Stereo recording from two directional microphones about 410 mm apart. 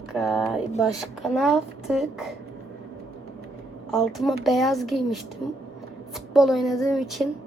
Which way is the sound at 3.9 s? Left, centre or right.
Centre.